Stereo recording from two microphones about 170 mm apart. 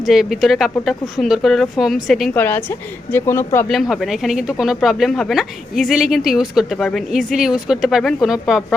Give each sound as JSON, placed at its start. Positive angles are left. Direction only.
{"t": 0.0, "sound": "speech", "side_deg": 0}
{"t": 3.7, "sound": "speech", "side_deg": 0}